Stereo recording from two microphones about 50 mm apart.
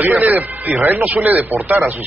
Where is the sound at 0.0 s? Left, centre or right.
Right.